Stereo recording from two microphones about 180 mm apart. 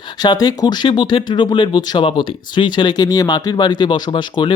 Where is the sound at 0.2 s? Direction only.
20° left (ahead or behind).